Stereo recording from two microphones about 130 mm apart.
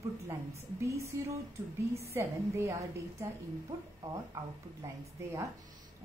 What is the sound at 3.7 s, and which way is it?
Speech, 25° right (ahead or behind).